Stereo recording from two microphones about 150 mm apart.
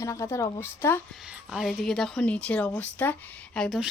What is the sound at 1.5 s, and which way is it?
Speech, centre (ahead or behind).